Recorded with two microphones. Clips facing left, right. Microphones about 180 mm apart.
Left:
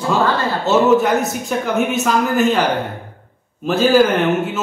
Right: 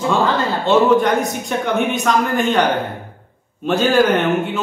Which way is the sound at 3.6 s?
Centre (ahead or behind).